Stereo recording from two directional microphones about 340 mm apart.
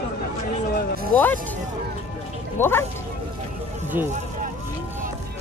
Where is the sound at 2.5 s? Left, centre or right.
Centre.